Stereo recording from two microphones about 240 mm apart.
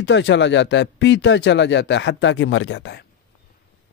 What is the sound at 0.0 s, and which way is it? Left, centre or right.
Speech, left.